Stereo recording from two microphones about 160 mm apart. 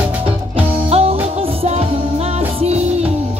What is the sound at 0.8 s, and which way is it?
Music, 40° right (ahead or behind).